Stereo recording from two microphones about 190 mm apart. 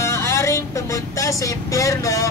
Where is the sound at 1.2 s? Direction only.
15° left (ahead or behind).